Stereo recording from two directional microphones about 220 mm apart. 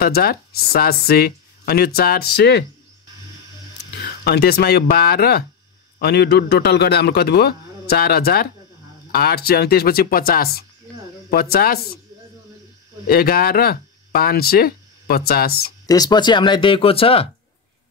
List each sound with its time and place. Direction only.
0.0 s speech: 45° left (ahead or behind)
3.9 s speech: 45° left (ahead or behind)
13.0 s speech: 40° left (ahead or behind)
15.9 s speech: 20° left (ahead or behind)